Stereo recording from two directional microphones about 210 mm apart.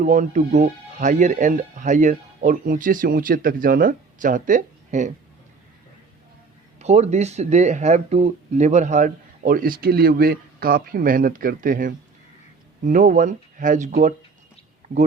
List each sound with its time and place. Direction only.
0.0 s speech: 35° right (ahead or behind)
6.7 s speech: 30° right (ahead or behind)